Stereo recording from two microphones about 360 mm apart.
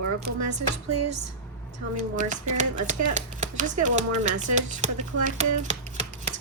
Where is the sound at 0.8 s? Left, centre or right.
Right.